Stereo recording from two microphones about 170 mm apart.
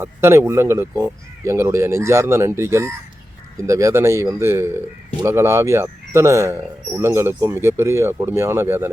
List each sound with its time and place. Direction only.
0.0 s speech: 15° right (ahead or behind)